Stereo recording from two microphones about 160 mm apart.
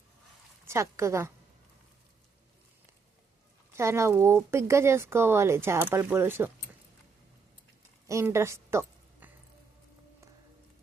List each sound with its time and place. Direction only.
0.7 s speech: 20° right (ahead or behind)
3.7 s speech: 15° right (ahead or behind)
8.0 s a woman's voice: 15° right (ahead or behind)
9.2 s music: 10° right (ahead or behind)